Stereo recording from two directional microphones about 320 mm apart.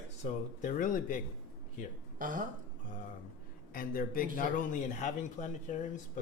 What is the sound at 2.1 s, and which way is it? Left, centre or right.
Speech, right.